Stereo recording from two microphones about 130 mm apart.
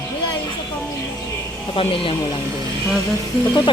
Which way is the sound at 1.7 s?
45° left (ahead or behind).